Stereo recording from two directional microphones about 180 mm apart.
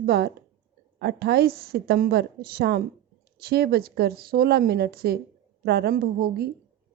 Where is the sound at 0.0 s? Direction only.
65° right (ahead or behind).